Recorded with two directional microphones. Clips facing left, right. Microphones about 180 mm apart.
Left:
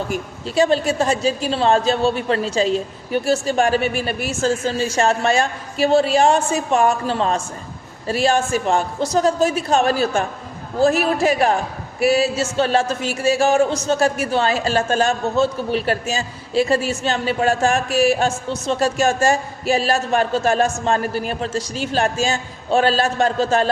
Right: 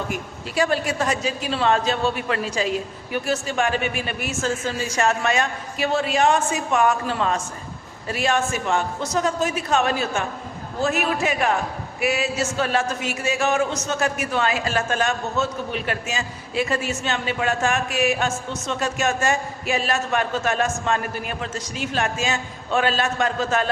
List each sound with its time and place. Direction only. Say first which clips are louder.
0.4 s a man's voice: left 5 dB; 25° left (ahead or behind)